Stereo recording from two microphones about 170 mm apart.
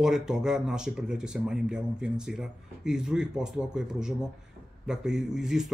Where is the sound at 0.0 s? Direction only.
5° right (ahead or behind).